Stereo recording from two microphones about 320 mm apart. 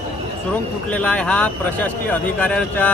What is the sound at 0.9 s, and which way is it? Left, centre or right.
A man's voice, centre.